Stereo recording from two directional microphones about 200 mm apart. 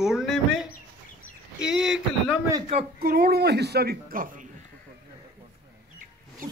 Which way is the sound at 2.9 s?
50° right (ahead or behind).